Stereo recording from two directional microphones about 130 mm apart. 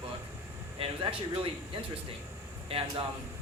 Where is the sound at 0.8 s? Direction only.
45° right (ahead or behind).